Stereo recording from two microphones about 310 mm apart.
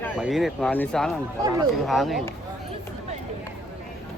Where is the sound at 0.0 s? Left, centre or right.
Centre.